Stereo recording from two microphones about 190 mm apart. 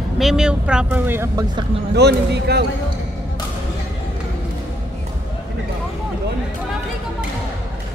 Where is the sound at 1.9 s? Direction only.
60° right (ahead or behind).